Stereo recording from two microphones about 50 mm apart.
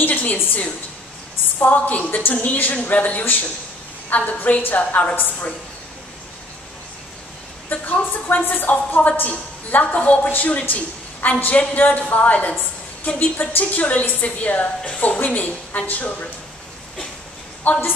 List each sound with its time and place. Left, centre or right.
0.0 s a sound: left
1.6 s a woman's voice: left
7.7 s a woman's voice: left
17.6 s a woman's voice: left